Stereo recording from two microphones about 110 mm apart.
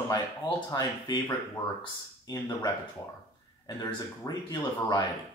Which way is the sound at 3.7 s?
35° left (ahead or behind).